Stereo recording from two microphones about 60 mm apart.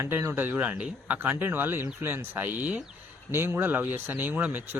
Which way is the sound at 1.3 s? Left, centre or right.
Right.